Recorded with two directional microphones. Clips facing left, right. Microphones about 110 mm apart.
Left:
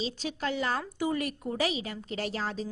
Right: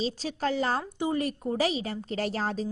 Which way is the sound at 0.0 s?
35° right (ahead or behind).